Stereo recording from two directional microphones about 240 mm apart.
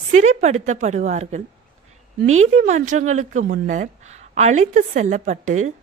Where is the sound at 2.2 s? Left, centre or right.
Right.